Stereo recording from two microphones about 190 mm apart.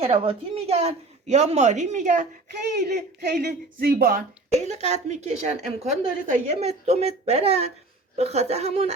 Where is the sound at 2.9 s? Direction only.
60° right (ahead or behind).